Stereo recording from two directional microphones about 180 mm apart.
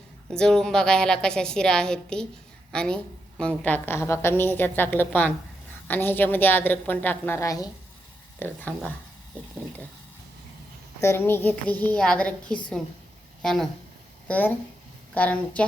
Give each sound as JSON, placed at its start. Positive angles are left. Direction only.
{"t": 0.3, "sound": "a woman's voice", "side_deg": 5}
{"t": 11.0, "sound": "a woman's voice", "side_deg": 15}